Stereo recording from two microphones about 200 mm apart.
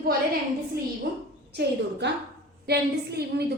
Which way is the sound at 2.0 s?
60° right (ahead or behind).